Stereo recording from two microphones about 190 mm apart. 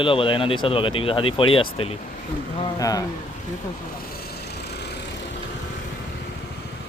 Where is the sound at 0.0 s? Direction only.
25° left (ahead or behind).